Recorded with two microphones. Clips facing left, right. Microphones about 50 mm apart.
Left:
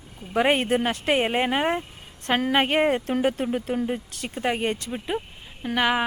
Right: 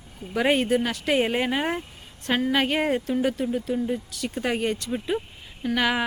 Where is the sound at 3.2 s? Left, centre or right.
Left.